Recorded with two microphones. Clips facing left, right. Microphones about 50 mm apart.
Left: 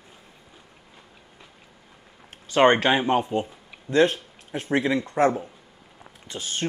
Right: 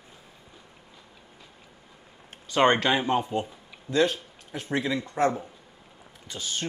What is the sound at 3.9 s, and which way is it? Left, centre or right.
Speech, left.